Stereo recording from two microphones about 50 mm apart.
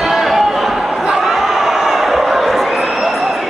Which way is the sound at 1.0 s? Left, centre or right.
Centre.